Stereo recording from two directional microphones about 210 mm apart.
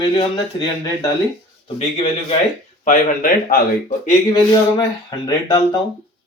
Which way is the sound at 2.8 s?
40° left (ahead or behind).